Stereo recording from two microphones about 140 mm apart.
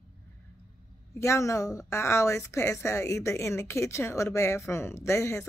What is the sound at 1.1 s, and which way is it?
A woman's voice, 20° left (ahead or behind).